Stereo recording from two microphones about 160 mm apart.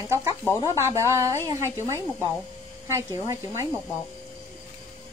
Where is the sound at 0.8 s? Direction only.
15° right (ahead or behind).